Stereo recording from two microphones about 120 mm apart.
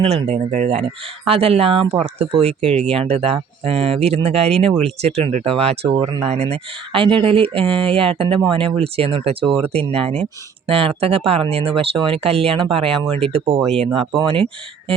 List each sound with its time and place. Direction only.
0.3 s speech: 75° right (ahead or behind); by 14.9 s 50° right (ahead or behind)